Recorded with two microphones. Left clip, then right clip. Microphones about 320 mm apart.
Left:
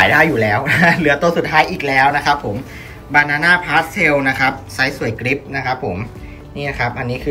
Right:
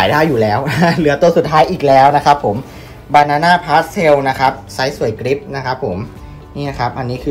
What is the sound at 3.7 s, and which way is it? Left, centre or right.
Speech, centre.